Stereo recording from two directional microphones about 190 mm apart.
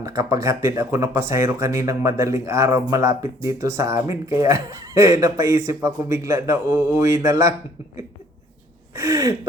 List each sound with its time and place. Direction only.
0.0 s speech: 15° right (ahead or behind)
9.0 s speech: 15° right (ahead or behind)